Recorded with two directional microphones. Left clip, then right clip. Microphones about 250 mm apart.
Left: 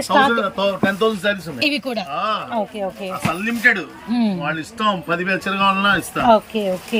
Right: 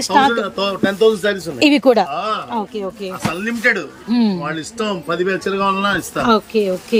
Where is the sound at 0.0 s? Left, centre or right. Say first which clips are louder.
Right 1 dB; centre.